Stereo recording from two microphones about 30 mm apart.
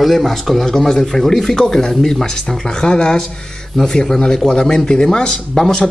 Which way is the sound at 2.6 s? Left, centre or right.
Left.